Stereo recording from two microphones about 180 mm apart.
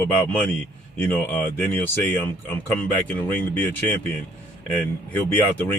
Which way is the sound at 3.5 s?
10° left (ahead or behind).